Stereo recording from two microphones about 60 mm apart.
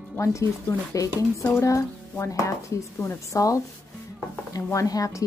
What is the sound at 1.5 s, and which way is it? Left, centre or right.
Speech, left.